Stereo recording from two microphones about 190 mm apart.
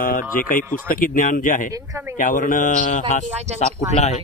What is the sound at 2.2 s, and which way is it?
Speech, 45° left (ahead or behind).